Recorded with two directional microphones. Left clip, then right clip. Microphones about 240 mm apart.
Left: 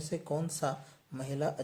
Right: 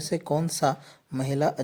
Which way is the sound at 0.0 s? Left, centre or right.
Right.